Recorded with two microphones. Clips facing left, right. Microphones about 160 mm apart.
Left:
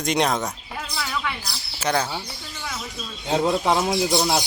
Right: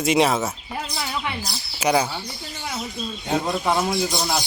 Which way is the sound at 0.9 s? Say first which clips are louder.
Left 2 dB; 25° right (ahead or behind).